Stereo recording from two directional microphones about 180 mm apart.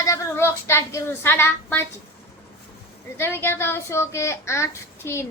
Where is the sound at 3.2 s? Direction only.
15° left (ahead or behind).